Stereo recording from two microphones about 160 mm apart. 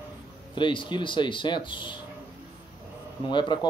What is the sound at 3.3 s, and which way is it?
Speech, 30° left (ahead or behind).